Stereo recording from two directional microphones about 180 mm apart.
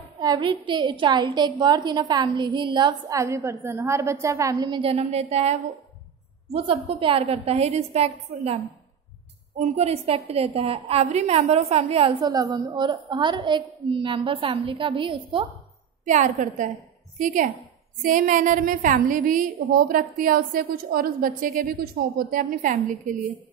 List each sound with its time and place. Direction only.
0.2 s a woman's voice: 25° right (ahead or behind)
9.6 s a woman's voice: 35° right (ahead or behind)
16.1 s a woman's voice: 45° right (ahead or behind)